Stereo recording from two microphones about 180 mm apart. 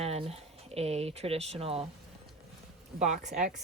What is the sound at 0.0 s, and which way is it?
Speech, 35° right (ahead or behind).